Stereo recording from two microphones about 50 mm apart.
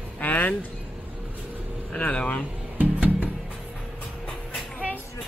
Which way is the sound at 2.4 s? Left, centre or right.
Right.